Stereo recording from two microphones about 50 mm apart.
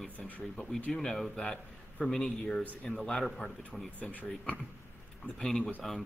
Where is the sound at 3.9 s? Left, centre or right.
Left.